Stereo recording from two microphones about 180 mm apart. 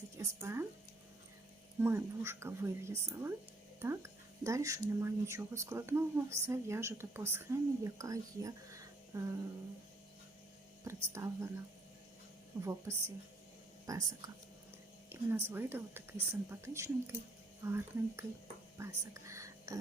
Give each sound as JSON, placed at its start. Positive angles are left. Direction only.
{"t": 0.2, "sound": "a sound", "side_deg": -15}
{"t": 1.8, "sound": "speech", "side_deg": -15}
{"t": 10.8, "sound": "speech", "side_deg": -15}
{"t": 12.6, "sound": "speech", "side_deg": -15}